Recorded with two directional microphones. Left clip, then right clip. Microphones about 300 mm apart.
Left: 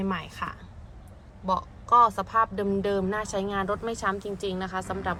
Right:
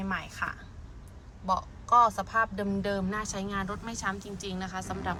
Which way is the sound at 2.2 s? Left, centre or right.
Left.